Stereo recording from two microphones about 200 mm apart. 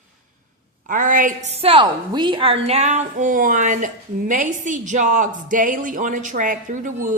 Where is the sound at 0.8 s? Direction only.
40° right (ahead or behind).